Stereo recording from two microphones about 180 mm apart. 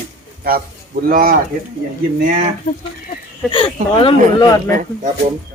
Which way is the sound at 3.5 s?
30° left (ahead or behind).